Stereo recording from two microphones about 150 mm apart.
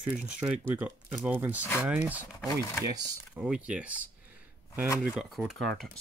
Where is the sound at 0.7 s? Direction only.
15° right (ahead or behind).